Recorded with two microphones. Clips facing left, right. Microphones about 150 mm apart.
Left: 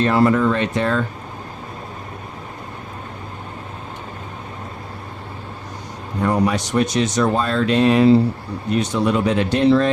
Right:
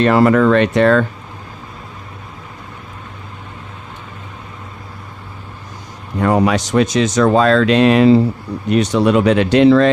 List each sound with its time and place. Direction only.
0.0 s speech: 85° right
6.1 s speech: 90° right
8.7 s speech: 75° right (ahead or behind)